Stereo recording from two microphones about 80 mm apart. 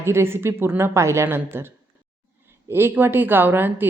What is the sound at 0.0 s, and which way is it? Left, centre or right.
A woman's voice, right.